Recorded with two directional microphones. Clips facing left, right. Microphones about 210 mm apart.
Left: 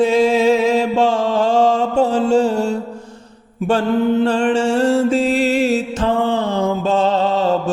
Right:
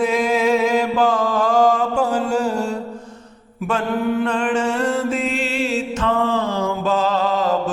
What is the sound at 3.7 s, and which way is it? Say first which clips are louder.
Mantra: left 5 dB; 30° left (ahead or behind).